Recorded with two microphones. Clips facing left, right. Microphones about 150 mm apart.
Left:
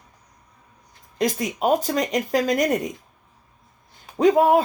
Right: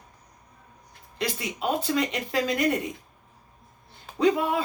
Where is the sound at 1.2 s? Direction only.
45° left (ahead or behind).